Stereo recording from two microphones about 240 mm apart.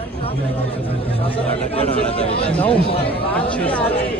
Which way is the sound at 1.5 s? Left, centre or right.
Left.